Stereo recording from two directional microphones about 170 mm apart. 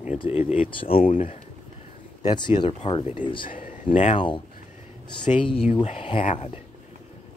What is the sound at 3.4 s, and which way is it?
Speech, 50° left (ahead or behind).